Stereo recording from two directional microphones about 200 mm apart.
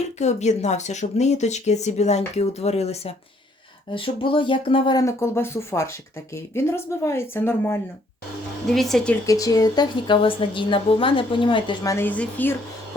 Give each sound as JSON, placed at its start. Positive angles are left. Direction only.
{"t": 0.2, "sound": "a woman's voice", "side_deg": 35}
{"t": 9.2, "sound": "a woman's voice", "side_deg": 15}